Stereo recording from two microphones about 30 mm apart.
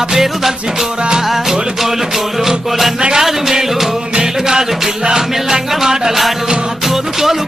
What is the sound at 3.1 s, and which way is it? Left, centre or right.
Music, centre.